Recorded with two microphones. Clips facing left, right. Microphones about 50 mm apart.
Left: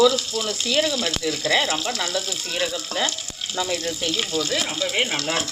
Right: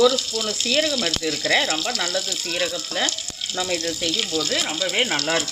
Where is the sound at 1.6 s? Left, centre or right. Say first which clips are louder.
Even; centre.